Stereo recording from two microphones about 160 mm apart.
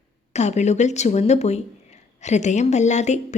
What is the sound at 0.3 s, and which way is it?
A woman's voice, 45° left (ahead or behind).